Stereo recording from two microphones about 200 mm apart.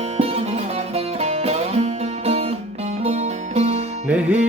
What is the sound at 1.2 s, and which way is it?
Music, 30° right (ahead or behind).